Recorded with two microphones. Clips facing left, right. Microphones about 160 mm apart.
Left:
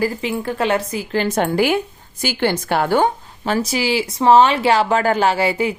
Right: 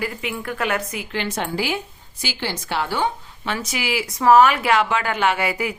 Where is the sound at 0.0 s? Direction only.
30° left (ahead or behind).